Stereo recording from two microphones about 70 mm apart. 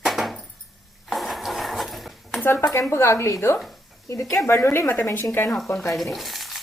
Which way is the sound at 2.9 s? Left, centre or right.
Left.